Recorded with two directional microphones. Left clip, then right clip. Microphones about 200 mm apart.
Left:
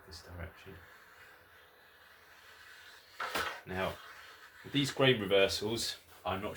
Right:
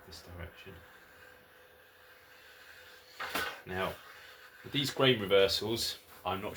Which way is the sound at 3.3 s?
10° right (ahead or behind).